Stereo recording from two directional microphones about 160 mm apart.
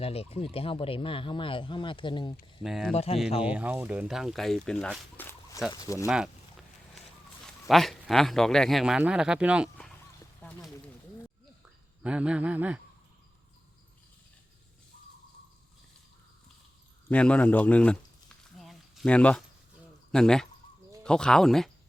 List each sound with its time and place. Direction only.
0.0 s speech: 40° left (ahead or behind)
2.6 s speech: centre (ahead or behind)
2.9 s speech: 40° left (ahead or behind)
3.4 s speech: 10° right (ahead or behind); by 6.1 s 20° left (ahead or behind)
6.1 s speech: 5° right (ahead or behind)
7.4 s speech: centre (ahead or behind)
10.4 s a sound: 10° left (ahead or behind)
12.0 s a sound: 5° right (ahead or behind)
17.1 s a man's voice: 5° left (ahead or behind)
18.5 s a sound: centre (ahead or behind)
20.1 s speech: 5° left (ahead or behind)